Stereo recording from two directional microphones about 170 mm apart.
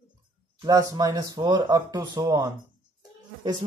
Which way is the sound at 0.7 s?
20° right (ahead or behind).